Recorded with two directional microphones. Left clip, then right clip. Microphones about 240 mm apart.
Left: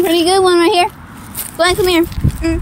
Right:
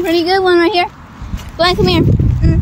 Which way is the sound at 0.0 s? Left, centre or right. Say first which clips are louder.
Left 1 dB; centre.